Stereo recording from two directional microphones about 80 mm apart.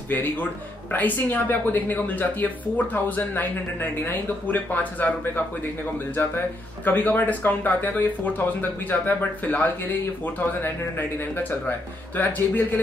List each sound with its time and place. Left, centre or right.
0.1 s speech: left